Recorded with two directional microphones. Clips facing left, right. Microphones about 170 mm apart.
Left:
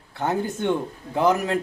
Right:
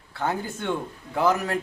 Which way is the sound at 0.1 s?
20° left (ahead or behind).